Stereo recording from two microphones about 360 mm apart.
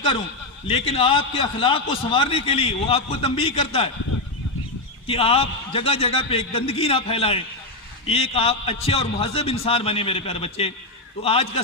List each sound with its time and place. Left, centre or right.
0.7 s a man's voice: centre
5.0 s a man's voice: centre